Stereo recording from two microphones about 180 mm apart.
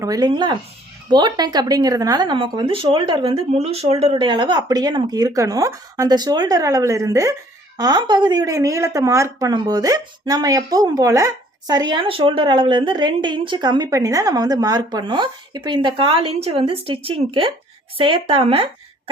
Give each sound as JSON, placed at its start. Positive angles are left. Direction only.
{"t": 0.0, "sound": "a woman's voice", "side_deg": -20}